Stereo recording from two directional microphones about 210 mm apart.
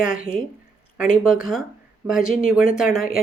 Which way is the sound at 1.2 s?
5° right (ahead or behind).